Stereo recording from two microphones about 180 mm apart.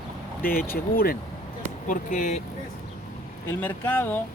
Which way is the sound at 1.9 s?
45° left (ahead or behind).